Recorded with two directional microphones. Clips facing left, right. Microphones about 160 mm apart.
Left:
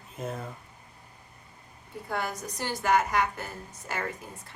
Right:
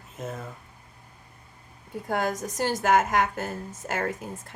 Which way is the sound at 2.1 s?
45° right (ahead or behind).